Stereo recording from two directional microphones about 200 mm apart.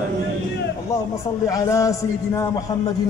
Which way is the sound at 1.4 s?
15° left (ahead or behind).